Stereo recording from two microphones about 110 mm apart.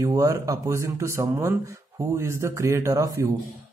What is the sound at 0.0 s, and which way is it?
Speech, 30° right (ahead or behind).